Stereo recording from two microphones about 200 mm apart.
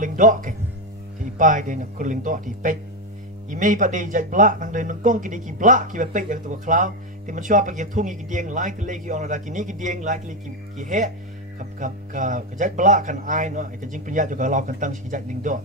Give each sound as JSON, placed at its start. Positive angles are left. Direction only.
{"t": 0.0, "sound": "speech", "side_deg": -40}